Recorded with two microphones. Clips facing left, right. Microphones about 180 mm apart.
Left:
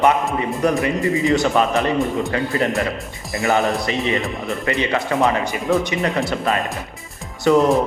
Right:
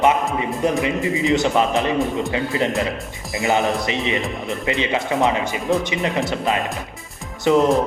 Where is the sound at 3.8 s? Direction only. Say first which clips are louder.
Left 1 dB; 20° right (ahead or behind).